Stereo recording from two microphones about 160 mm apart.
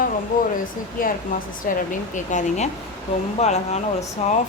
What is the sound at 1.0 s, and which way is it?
Speech, 60° left (ahead or behind).